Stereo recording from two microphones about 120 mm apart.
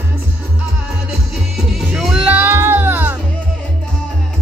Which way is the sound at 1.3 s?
5° right (ahead or behind).